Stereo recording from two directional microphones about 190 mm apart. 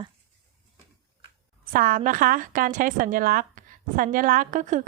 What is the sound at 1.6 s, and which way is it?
A woman's voice, 45° right (ahead or behind).